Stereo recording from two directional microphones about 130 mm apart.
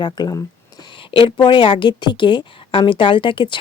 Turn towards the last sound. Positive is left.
turn(degrees=40)  # may be behind; listen again after turning